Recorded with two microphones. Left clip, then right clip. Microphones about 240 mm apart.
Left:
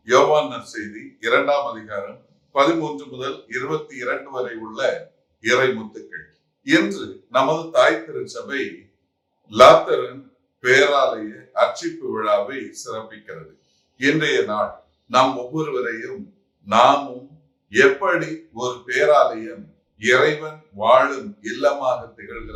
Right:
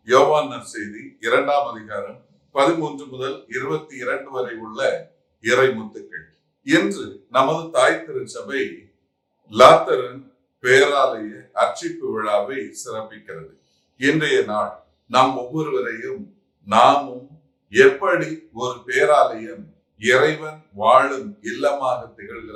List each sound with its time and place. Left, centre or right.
0.0 s speech: centre